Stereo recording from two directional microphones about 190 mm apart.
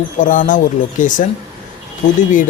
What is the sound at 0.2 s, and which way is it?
Speech, 45° left (ahead or behind).